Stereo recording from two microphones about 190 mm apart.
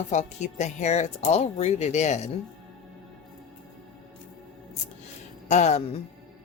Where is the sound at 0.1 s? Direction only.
40° left (ahead or behind).